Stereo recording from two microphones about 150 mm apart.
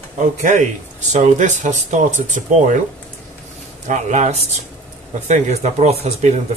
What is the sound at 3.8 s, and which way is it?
Speech, 55° right (ahead or behind).